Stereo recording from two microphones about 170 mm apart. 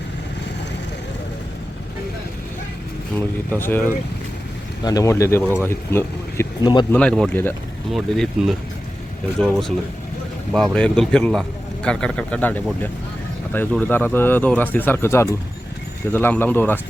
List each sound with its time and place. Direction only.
3.2 s speech: 10° left (ahead or behind)
6.6 s speech: 25° left (ahead or behind)
6.9 s a man's voice: 5° left (ahead or behind)